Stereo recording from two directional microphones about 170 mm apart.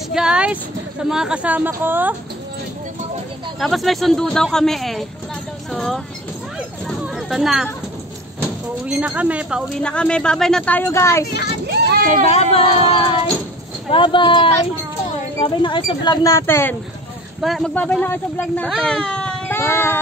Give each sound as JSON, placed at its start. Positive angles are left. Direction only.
{"t": 0.1, "sound": "speech", "side_deg": -5}
{"t": 3.5, "sound": "speech", "side_deg": 0}
{"t": 6.9, "sound": "a sound", "side_deg": 0}
{"t": 8.4, "sound": "speech", "side_deg": -10}
{"t": 9.8, "sound": "speech", "side_deg": 5}
{"t": 11.6, "sound": "a sound", "side_deg": -75}
{"t": 12.3, "sound": "speech", "side_deg": 35}
{"t": 17.4, "sound": "speech", "side_deg": 0}